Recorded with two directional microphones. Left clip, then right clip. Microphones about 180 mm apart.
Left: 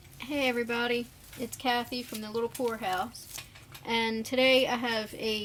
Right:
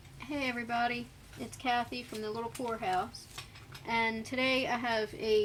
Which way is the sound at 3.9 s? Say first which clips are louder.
Left 2 dB; 40° left (ahead or behind).